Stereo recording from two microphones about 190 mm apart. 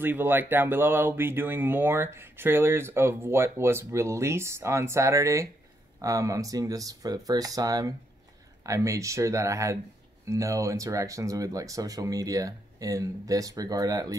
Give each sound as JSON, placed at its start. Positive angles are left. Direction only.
{"t": 0.0, "sound": "speech", "side_deg": -10}